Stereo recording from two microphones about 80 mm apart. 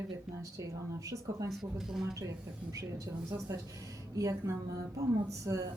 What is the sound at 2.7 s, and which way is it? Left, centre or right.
Speech, right.